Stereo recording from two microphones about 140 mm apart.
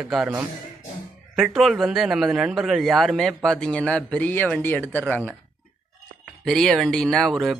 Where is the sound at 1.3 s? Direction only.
Centre (ahead or behind).